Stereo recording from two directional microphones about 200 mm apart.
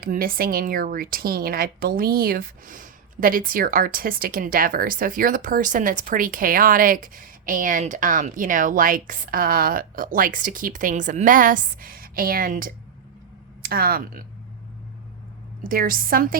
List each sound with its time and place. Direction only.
0.0 s speech: 45° right (ahead or behind)
15.6 s speech: 45° right (ahead or behind)